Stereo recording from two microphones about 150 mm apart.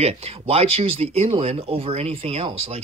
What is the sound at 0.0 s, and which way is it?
Speech, 40° right (ahead or behind).